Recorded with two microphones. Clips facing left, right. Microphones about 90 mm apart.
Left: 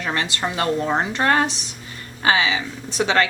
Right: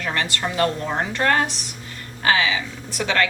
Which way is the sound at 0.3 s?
20° left (ahead or behind).